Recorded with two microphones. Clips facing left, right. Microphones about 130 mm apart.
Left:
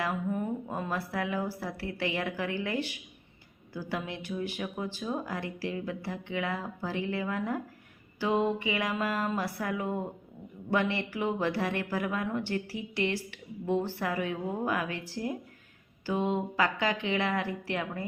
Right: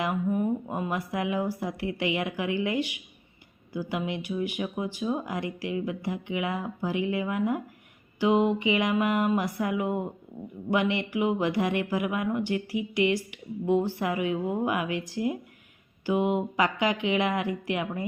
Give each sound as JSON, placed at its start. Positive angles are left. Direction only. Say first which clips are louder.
{"t": 0.0, "sound": "speech", "louder": "right 4 dB", "side_deg": -15}